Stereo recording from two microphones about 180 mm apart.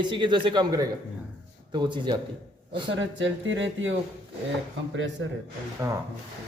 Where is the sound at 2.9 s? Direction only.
90° right.